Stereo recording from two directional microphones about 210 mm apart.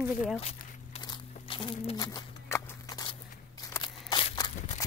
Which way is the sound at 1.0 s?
20° left (ahead or behind).